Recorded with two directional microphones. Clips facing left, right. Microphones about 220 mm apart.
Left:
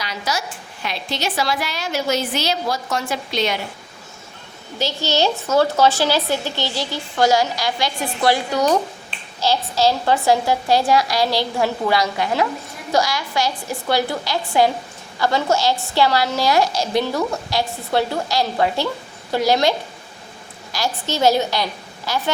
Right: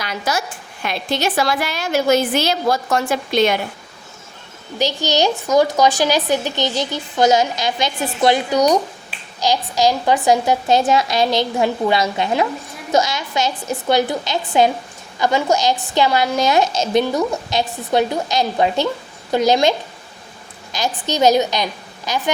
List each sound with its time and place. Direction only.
0.0 s a woman's voice: 50° right (ahead or behind)
4.8 s a woman's voice: 15° right (ahead or behind)
20.7 s a woman's voice: 20° right (ahead or behind)